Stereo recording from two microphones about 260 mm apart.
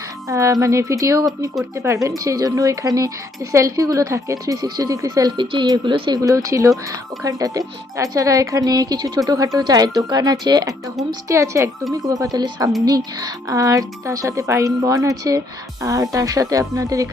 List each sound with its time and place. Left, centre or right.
0.3 s speech: centre